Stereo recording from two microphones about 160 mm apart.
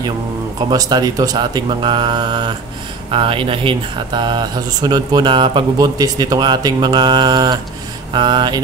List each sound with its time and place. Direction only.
0.7 s speech: 25° right (ahead or behind)